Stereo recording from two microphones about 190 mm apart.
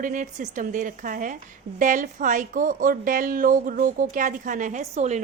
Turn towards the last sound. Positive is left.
turn(degrees=-35)  # may be behind; listen again after turning